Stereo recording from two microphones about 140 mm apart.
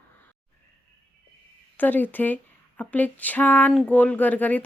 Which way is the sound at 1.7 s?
15° left (ahead or behind).